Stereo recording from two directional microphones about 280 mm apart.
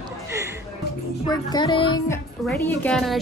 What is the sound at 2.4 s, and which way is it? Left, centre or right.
Speech, centre.